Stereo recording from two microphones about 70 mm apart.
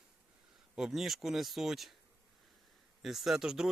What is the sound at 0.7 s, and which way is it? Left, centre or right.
Speech, centre.